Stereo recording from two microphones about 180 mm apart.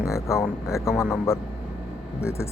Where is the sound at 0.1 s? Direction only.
15° left (ahead or behind).